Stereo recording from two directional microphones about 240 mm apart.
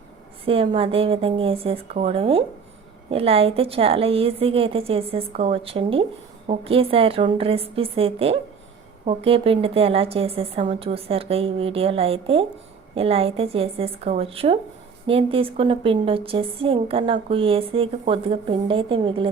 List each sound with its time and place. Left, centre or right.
0.4 s a woman's voice: right